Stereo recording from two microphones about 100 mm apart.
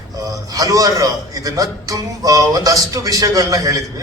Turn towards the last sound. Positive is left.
turn(degrees=-35)  # may be behind; listen again after turning